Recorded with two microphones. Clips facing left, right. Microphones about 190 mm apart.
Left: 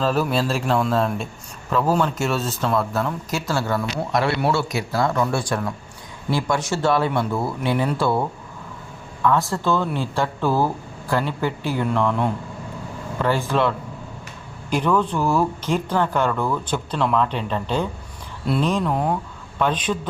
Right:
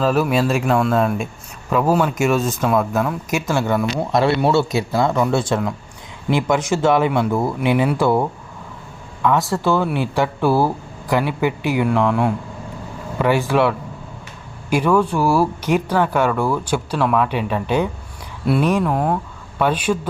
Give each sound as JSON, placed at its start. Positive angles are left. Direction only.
{"t": 0.0, "sound": "speech", "side_deg": -10}
{"t": 9.5, "sound": "a man's voice", "side_deg": -15}